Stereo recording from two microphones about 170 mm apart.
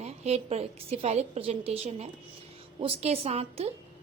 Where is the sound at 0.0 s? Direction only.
40° right (ahead or behind).